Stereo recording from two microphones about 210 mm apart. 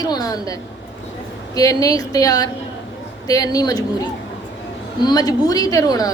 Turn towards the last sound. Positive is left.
turn(degrees=15)  # may be behind; listen again after turning